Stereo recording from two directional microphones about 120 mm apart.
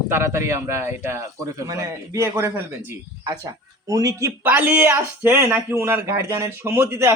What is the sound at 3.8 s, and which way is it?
Speech, 25° right (ahead or behind).